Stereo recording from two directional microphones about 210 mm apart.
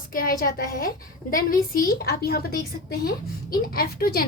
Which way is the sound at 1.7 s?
45° left (ahead or behind).